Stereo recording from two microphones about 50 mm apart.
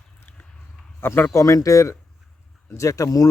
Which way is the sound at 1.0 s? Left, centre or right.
Left.